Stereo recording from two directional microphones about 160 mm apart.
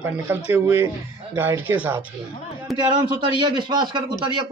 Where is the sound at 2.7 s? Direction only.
30° right (ahead or behind).